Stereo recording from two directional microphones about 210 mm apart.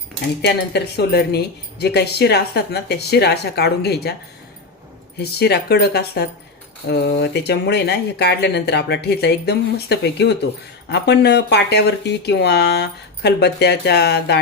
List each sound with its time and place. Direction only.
0.4 s speech: 50° left (ahead or behind)
5.2 s speech: 50° left (ahead or behind)